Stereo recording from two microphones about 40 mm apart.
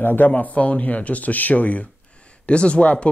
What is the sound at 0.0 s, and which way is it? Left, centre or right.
Speech, left.